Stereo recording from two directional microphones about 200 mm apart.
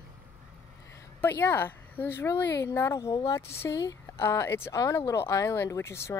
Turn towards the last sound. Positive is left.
turn(degrees=15)  # may be behind; listen again after turning